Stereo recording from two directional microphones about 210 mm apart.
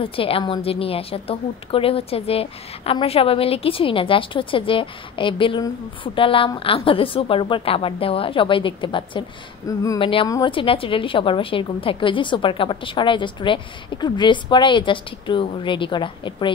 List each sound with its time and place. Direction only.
0.0 s a woman's voice: 25° left (ahead or behind)